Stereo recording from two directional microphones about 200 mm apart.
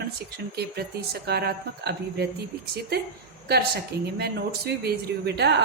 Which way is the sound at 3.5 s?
55° right (ahead or behind).